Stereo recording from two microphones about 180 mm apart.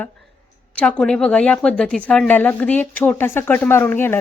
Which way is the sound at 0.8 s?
5° left (ahead or behind).